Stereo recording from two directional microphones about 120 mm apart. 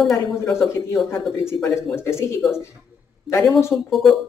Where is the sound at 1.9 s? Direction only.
20° left (ahead or behind).